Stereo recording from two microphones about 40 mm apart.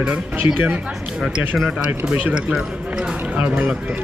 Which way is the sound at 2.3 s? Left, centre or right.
Right.